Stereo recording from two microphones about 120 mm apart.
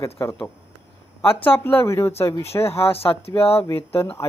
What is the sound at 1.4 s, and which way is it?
Speech, 15° left (ahead or behind).